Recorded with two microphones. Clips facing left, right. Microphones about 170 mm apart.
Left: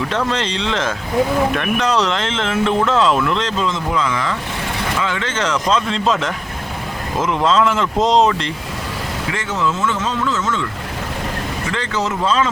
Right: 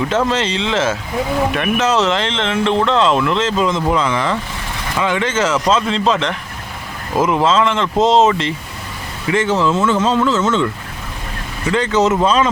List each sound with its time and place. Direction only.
0.3 s speech: 5° right (ahead or behind)
3.6 s speech: 20° right (ahead or behind); by 8.5 s centre (ahead or behind)
9.3 s speech: 30° right (ahead or behind)
11.7 s speech: 20° right (ahead or behind)